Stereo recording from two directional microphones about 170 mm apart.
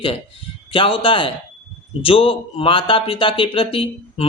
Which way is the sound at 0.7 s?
30° left (ahead or behind).